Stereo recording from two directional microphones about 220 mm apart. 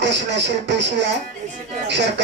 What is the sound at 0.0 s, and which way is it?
Speech, 50° right (ahead or behind).